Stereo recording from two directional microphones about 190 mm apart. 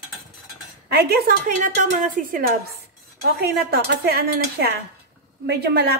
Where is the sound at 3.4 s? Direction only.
55° right (ahead or behind).